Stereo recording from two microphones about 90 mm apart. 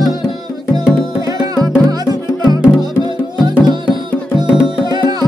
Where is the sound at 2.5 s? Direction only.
50° right (ahead or behind).